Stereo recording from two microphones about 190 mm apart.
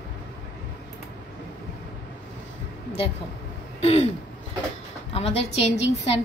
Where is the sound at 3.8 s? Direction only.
35° left (ahead or behind).